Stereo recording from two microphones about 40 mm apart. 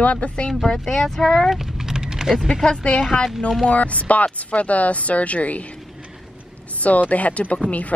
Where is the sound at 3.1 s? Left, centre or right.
Left.